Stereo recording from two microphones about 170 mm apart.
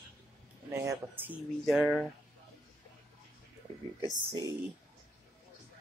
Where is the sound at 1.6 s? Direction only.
Centre (ahead or behind).